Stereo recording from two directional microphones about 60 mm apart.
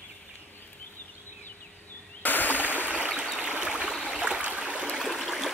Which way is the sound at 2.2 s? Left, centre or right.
Left.